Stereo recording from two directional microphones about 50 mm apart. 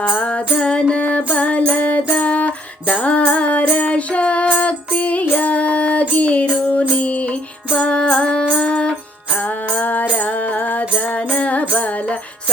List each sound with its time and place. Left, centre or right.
0.1 s music: left
5.2 s child singing: left
6.7 s music: left
9.7 s music: left